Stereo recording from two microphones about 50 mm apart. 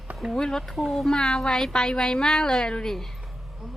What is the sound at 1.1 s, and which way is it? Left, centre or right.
Speech, centre.